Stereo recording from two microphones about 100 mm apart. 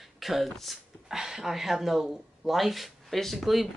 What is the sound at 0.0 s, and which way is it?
Speech, centre (ahead or behind).